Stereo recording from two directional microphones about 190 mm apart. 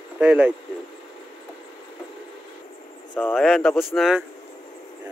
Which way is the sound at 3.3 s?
Centre (ahead or behind).